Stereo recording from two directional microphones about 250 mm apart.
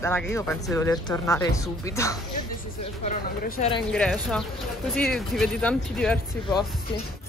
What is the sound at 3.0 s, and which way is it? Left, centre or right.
Speech, left.